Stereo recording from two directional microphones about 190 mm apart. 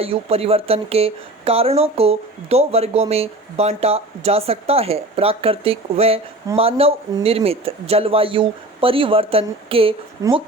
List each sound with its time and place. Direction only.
0.0 s speech: 30° right (ahead or behind)